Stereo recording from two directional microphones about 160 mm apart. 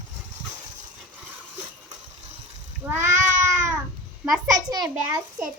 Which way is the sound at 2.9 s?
15° right (ahead or behind).